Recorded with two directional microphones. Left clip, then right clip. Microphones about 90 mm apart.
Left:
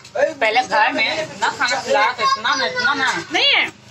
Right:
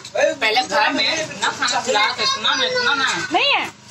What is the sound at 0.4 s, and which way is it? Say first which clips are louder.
A woman's voice: left 2 dB; 30° left (ahead or behind).